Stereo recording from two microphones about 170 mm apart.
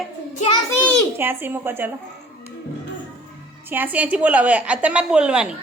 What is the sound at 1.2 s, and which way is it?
Speech, 10° right (ahead or behind).